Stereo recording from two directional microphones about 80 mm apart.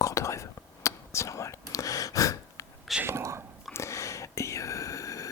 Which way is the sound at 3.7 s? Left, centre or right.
Left.